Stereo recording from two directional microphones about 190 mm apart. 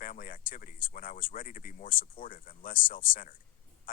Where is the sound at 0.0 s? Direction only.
45° left (ahead or behind).